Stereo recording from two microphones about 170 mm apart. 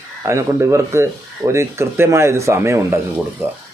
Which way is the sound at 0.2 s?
15° right (ahead or behind).